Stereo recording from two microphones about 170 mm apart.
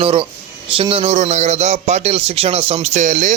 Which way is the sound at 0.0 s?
35° right (ahead or behind).